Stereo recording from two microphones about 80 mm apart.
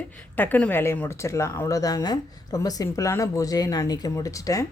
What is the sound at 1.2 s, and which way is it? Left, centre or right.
A woman's voice, left.